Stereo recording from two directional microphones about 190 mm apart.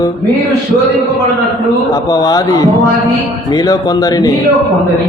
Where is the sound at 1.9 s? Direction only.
20° left (ahead or behind).